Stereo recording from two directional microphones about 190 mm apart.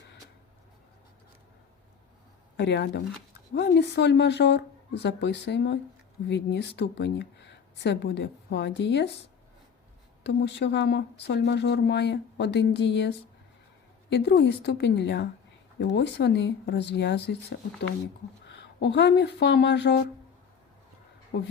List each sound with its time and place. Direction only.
2.6 s speech: 65° left (ahead or behind)
10.2 s speech: 65° left (ahead or behind)
21.3 s speech: 65° left (ahead or behind)